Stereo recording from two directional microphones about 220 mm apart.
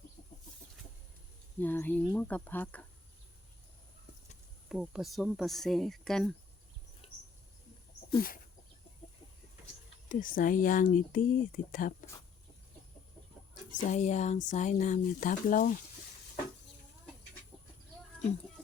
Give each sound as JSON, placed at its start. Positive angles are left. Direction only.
{"t": 1.5, "sound": "speech", "side_deg": 10}
{"t": 4.7, "sound": "speech", "side_deg": 0}
{"t": 7.0, "sound": "bird", "side_deg": 25}
{"t": 10.1, "sound": "speech", "side_deg": 40}
{"t": 13.5, "sound": "speech", "side_deg": 35}